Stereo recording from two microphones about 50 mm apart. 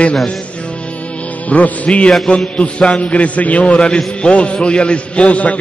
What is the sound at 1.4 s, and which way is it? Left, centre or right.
A man's voice, left.